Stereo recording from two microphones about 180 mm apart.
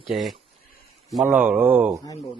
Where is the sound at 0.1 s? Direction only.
Centre (ahead or behind).